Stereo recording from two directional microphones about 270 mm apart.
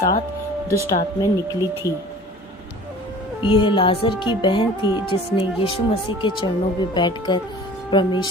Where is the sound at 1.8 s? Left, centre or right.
Centre.